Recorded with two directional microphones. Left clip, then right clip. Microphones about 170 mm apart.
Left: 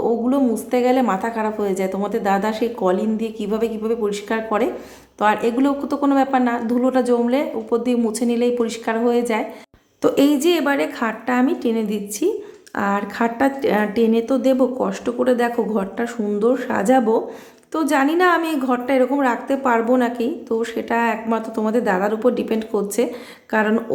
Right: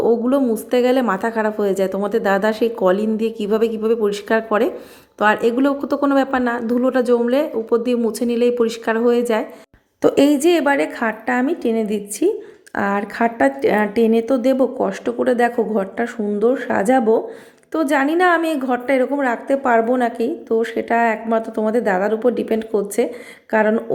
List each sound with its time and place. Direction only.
0.0 s a woman's voice: 25° right (ahead or behind)